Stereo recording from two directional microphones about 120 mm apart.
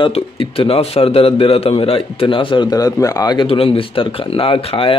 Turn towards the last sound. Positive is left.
turn(degrees=50)  # may be behind; listen again after turning